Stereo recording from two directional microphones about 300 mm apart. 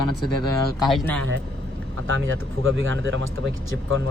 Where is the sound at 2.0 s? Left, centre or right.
Right.